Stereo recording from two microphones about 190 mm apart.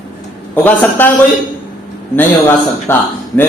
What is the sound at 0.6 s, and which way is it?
Speech, 10° left (ahead or behind).